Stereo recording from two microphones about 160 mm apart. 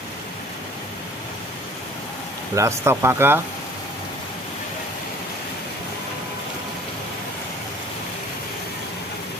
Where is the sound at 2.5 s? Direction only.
15° right (ahead or behind).